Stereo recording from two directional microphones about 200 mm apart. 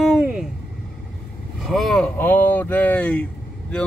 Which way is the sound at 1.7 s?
Centre (ahead or behind).